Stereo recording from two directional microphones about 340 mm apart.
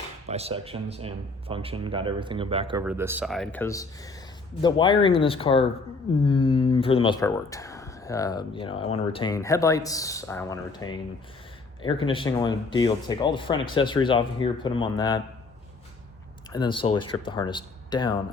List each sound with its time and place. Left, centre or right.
0.3 s speech: centre
16.5 s speech: centre